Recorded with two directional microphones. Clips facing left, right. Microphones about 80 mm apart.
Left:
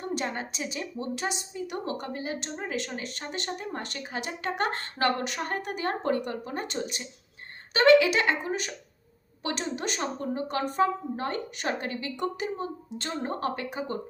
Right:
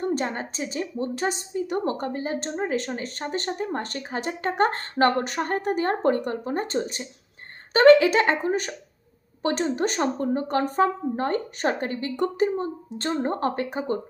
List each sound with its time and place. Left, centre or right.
0.0 s a woman's voice: right